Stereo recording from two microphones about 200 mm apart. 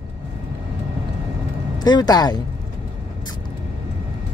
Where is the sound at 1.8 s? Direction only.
20° left (ahead or behind).